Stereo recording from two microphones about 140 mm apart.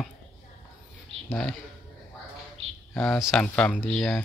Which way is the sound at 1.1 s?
45° right (ahead or behind).